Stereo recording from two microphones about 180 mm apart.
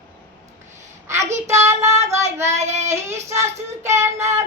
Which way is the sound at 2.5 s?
40° right (ahead or behind).